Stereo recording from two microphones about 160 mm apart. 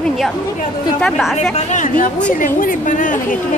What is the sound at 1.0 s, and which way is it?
Speech, centre (ahead or behind).